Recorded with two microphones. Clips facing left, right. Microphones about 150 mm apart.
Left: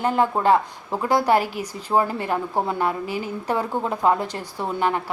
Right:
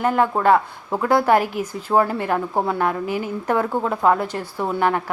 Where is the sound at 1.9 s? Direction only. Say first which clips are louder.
Right 2 dB; centre (ahead or behind).